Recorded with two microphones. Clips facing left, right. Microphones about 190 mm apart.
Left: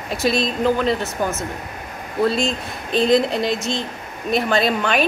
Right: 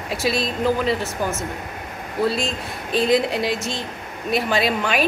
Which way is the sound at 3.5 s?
20° left (ahead or behind).